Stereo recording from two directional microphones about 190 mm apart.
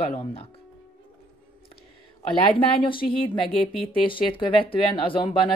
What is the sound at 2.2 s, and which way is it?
Speech, 25° left (ahead or behind).